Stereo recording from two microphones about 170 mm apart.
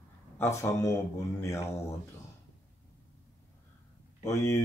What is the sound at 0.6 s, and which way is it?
Speech, 20° left (ahead or behind).